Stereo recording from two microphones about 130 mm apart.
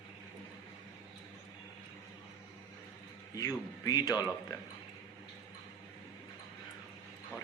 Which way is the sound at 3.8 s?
30° left (ahead or behind).